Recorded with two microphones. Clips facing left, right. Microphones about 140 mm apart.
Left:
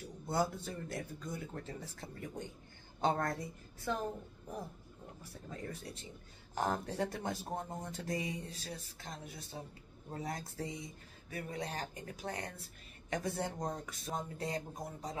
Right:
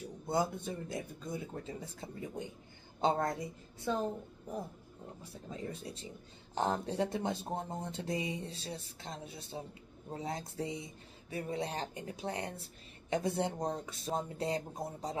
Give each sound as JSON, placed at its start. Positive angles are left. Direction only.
{"t": 0.3, "sound": "speech", "side_deg": -20}
{"t": 5.5, "sound": "speech", "side_deg": -20}